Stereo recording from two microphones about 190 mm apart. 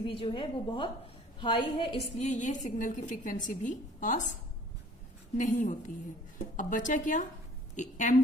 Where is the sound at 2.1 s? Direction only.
40° left (ahead or behind).